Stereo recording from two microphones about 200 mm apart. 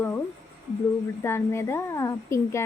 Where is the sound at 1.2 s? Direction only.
10° left (ahead or behind).